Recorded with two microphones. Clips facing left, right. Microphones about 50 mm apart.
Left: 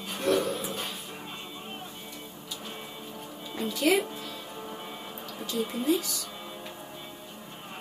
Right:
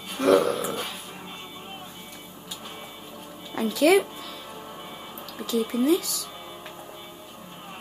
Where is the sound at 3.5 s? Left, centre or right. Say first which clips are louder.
Right 6 dB; right.